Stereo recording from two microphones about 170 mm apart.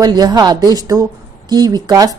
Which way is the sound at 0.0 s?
25° right (ahead or behind).